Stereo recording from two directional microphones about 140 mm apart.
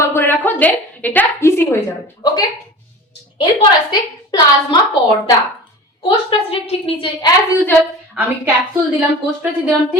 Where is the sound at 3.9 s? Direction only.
30° left (ahead or behind).